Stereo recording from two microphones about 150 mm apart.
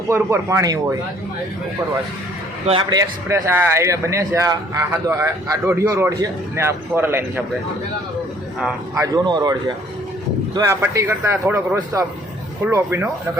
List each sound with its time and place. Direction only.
0.1 s a man's voice: 20° right (ahead or behind)
2.9 s a man's voice: 20° right (ahead or behind)
9.0 s a man's voice: 25° right (ahead or behind)